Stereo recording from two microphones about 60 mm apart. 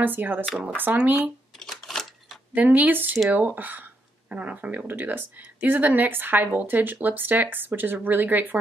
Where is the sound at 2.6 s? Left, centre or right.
Right.